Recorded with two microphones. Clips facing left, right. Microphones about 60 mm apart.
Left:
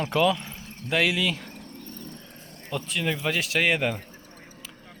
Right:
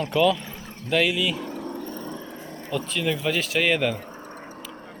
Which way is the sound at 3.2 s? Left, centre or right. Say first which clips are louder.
Right 2 dB; left.